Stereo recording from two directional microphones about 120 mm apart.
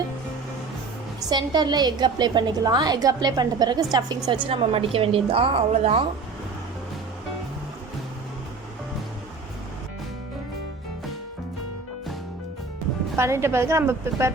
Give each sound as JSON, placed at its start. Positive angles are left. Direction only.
{"t": 1.3, "sound": "a woman's voice", "side_deg": -35}
{"t": 4.4, "sound": "a woman's voice", "side_deg": -50}
{"t": 13.1, "sound": "a woman's voice", "side_deg": -20}